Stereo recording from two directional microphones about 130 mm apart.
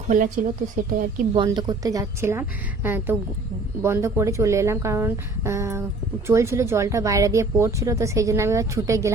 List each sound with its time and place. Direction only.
0.1 s a woman's voice: 90° right
1.5 s speech: 30° right (ahead or behind)